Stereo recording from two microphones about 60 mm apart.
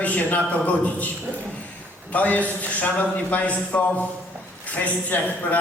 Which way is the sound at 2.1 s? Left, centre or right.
Left.